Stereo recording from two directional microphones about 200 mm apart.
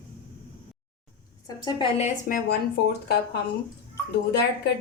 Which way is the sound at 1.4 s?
20° left (ahead or behind).